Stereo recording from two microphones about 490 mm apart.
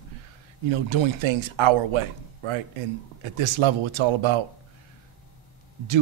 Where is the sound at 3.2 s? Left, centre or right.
Right.